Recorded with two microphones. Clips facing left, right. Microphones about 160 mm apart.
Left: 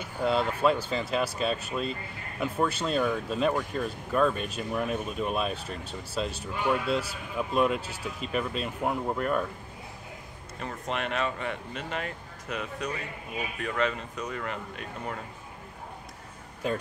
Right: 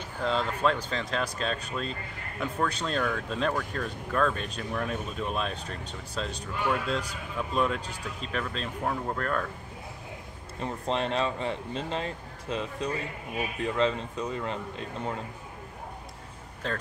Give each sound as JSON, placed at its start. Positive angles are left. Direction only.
{"t": 0.0, "sound": "speech", "side_deg": 10}
{"t": 10.6, "sound": "speech", "side_deg": -30}
{"t": 16.6, "sound": "speech", "side_deg": 10}